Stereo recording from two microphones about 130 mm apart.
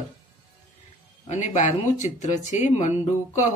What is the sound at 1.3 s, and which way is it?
Speech, 65° left (ahead or behind).